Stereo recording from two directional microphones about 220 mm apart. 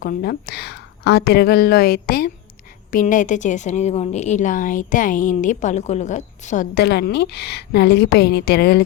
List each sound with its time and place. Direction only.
0.0 s a woman's voice: 40° left (ahead or behind)